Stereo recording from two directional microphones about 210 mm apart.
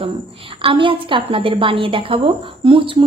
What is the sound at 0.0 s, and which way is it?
A woman's voice, 25° right (ahead or behind).